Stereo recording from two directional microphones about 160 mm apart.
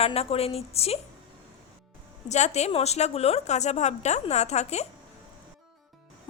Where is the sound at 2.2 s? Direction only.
45° left (ahead or behind).